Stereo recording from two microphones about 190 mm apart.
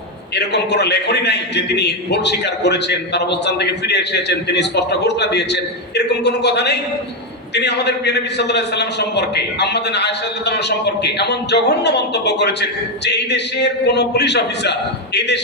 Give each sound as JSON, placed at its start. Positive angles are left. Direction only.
{"t": 0.3, "sound": "a man's voice", "side_deg": 60}